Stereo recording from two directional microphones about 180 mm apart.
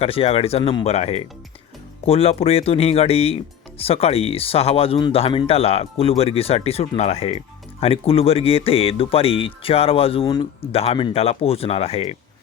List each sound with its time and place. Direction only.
0.0 s speech: 35° left (ahead or behind)